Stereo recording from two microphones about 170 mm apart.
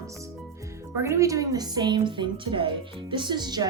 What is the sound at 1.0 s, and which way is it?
Speech, 15° right (ahead or behind).